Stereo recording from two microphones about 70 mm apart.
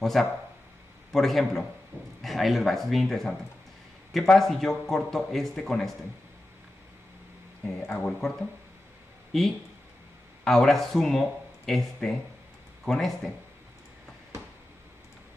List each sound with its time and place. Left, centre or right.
0.0 s speech: centre
1.9 s speech: right
2.2 s a man's voice: centre
7.8 s a man's voice: centre